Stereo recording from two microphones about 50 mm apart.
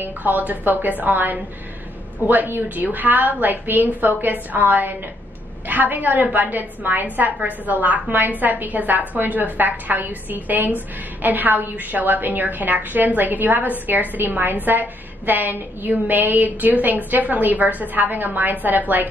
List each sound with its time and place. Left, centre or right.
0.0 s a woman's voice: right